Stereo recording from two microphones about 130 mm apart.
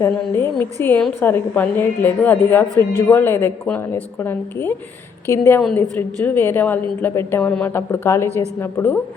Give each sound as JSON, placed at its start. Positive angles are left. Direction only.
{"t": 0.0, "sound": "a woman's voice", "side_deg": 20}